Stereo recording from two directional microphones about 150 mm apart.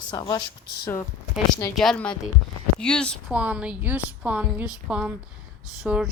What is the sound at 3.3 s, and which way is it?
A woman's voice, 10° right (ahead or behind).